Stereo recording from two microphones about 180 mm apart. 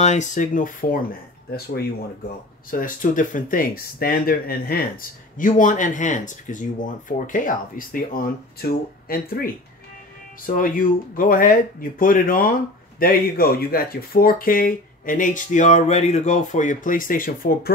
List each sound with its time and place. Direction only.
0.0 s speech: 40° left (ahead or behind)
2.7 s speech: 50° left (ahead or behind)
5.4 s speech: 45° left (ahead or behind)